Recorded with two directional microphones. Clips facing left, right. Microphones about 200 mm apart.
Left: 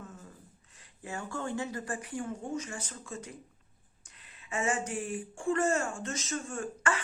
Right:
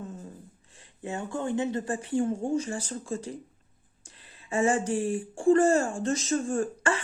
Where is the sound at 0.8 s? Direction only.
25° right (ahead or behind).